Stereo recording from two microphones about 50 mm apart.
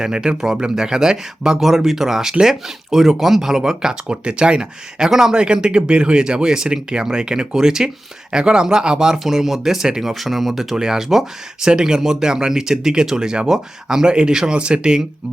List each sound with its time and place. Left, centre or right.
0.0 s speech: centre